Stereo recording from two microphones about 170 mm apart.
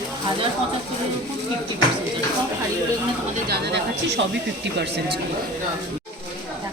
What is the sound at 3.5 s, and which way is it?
Speech, 85° right.